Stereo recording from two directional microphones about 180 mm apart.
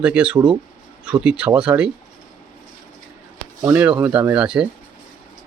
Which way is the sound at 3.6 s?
10° right (ahead or behind).